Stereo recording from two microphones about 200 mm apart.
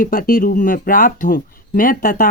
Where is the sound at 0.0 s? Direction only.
45° left (ahead or behind).